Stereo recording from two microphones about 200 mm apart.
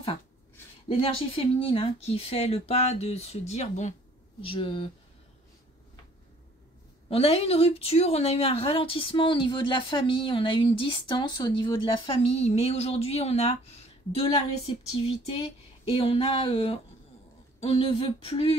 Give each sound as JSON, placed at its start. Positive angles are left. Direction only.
{"t": 0.8, "sound": "speech", "side_deg": 30}
{"t": 7.1, "sound": "speech", "side_deg": 30}